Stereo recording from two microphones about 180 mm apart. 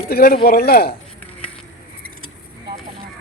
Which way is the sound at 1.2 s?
10° left (ahead or behind).